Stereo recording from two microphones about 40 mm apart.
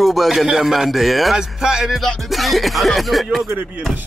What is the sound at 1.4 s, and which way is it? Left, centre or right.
Speech, centre.